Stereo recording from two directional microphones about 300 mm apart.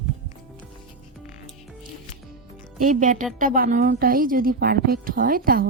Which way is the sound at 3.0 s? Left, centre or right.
Right.